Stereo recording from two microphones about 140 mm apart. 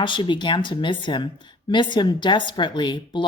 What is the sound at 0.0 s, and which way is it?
Speech, 35° left (ahead or behind).